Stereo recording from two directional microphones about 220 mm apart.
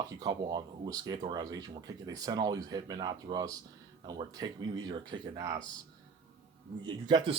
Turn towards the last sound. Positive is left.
turn(degrees=-20)  # may be behind; listen again after turning